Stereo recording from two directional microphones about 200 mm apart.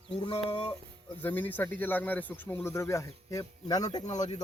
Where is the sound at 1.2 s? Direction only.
10° left (ahead or behind).